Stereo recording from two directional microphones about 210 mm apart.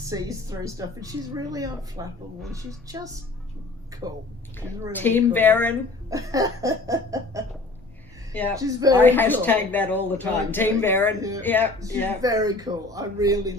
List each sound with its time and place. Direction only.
0.0 s a woman's voice: 15° right (ahead or behind)
4.9 s a woman's voice: 10° left (ahead or behind)
6.1 s a woman's voice: 15° right (ahead or behind)
8.3 s speech: 10° left (ahead or behind)
8.5 s a woman's voice: 15° right (ahead or behind)
9.0 s a woman's voice: 10° left (ahead or behind)
12.2 s a woman's voice: 15° right (ahead or behind)